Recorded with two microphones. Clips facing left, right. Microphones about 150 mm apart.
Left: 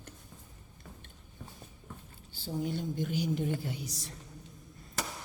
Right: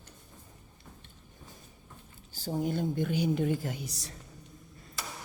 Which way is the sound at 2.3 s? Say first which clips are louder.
Right 3 dB; 45° right (ahead or behind).